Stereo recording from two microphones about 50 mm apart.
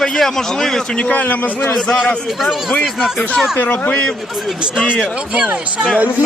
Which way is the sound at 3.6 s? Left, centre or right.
Left.